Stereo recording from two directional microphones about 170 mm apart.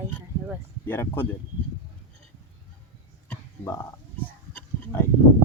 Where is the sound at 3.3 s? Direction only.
15° left (ahead or behind).